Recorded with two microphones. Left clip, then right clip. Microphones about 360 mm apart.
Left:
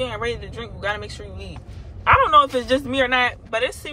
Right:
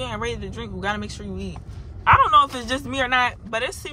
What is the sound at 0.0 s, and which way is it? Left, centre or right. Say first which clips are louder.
A man's voice: left 3 dB; centre.